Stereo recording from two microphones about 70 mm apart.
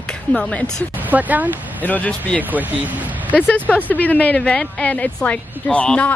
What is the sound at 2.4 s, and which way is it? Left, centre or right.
Speech, right.